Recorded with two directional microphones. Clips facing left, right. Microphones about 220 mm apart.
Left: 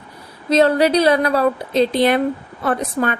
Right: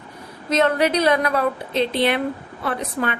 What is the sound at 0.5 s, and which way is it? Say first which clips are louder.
A woman's voice: left 5 dB; 35° left (ahead or behind).